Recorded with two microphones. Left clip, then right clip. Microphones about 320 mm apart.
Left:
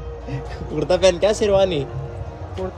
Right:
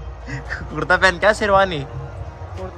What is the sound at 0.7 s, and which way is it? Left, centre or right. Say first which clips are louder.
A man's voice: even; centre.